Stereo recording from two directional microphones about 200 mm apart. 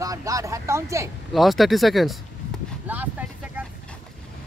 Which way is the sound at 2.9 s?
10° right (ahead or behind).